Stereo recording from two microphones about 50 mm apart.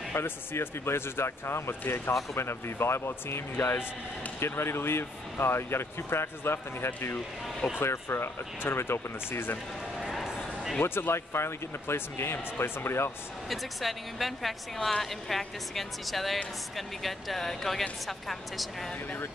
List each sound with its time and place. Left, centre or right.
0.1 s speech: left
10.0 s a sound: centre
10.8 s speech: left
13.5 s a woman's voice: centre